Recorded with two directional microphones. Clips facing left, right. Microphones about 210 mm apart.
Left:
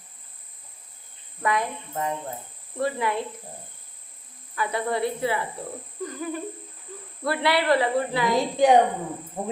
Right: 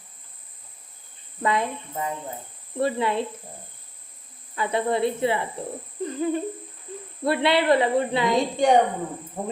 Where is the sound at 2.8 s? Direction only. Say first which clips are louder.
Right 2 dB; 25° right (ahead or behind).